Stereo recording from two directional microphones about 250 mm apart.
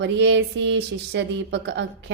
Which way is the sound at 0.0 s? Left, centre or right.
Right.